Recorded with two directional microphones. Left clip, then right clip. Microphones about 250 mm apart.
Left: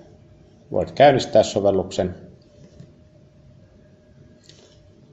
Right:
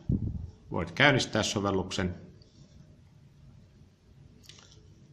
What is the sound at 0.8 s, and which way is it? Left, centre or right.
Speech, right.